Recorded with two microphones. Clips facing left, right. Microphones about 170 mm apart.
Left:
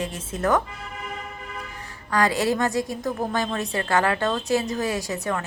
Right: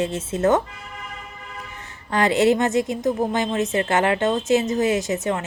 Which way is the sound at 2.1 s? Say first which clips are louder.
Right 4 dB; 25° right (ahead or behind).